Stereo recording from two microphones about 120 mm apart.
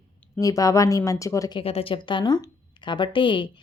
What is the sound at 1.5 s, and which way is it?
Speech, 55° left (ahead or behind).